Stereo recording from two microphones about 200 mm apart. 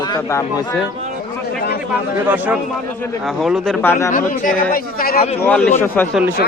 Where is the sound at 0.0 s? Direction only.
15° left (ahead or behind).